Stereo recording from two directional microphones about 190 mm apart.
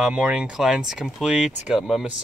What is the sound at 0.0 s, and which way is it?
Speech, 5° right (ahead or behind).